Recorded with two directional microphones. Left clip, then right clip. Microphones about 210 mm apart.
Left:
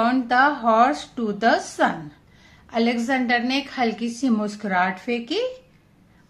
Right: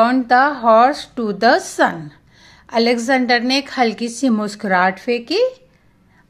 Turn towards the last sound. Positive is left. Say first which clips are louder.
# right 8 dB
turn(degrees=-40)  # may be behind; listen again after turning